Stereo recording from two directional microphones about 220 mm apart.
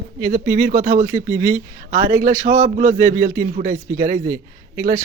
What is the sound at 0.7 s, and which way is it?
Speech, 35° right (ahead or behind).